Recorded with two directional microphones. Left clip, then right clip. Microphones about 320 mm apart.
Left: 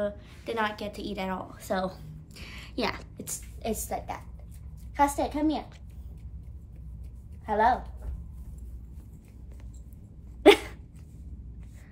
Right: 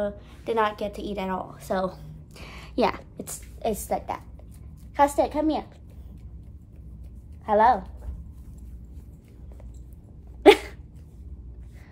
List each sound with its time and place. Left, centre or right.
0.0 s a woman's voice: centre; by 5.6 s right
7.4 s a woman's voice: right
10.4 s dog: centre